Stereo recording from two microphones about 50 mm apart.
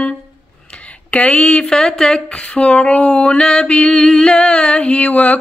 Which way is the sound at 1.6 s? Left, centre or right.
Centre.